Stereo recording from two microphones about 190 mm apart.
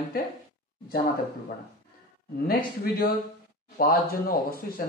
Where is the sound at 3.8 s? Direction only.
50° left (ahead or behind).